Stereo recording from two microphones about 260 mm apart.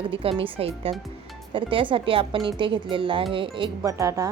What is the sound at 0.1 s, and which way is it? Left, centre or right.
Speech, right.